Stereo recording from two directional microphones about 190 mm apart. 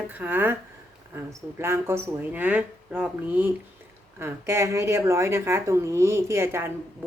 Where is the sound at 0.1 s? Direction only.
10° right (ahead or behind).